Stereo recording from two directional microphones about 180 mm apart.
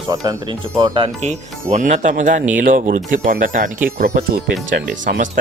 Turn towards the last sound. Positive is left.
turn(degrees=-50)  # may be behind; listen again after turning